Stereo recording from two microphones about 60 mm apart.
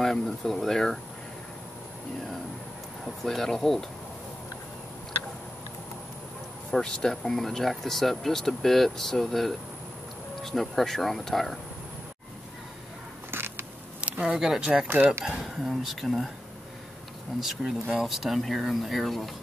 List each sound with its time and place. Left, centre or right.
0.0 s speech: centre
3.3 s speech: centre
6.7 s speech: centre
13.3 s a sound: right
14.0 s speech: centre
17.4 s speech: centre